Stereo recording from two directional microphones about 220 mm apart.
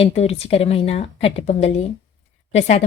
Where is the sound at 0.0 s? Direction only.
30° left (ahead or behind).